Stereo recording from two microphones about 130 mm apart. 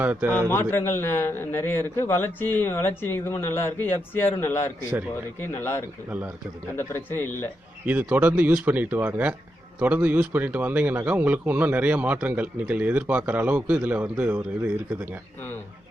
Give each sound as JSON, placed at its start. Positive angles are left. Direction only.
{"t": 0.0, "sound": "a man's voice", "side_deg": -15}
{"t": 0.3, "sound": "a man's voice", "side_deg": 15}
{"t": 6.1, "sound": "a man's voice", "side_deg": -10}
{"t": 6.7, "sound": "a man's voice", "side_deg": 20}
{"t": 7.9, "sound": "a man's voice", "side_deg": -10}